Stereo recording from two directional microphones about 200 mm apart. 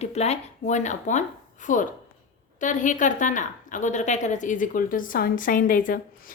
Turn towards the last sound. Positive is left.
turn(degrees=45)  # may be behind; listen again after turning